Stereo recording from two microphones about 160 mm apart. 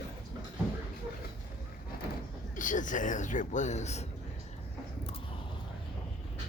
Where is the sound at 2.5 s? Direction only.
55° left (ahead or behind).